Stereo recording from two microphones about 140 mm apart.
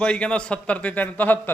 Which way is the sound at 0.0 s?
5° left (ahead or behind).